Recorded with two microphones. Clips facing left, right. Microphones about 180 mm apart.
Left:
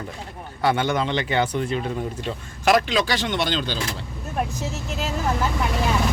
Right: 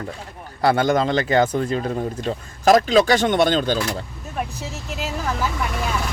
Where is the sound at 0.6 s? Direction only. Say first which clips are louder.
Right 4 dB; 40° right (ahead or behind).